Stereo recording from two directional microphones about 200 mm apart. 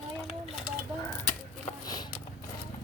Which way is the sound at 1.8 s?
20° left (ahead or behind).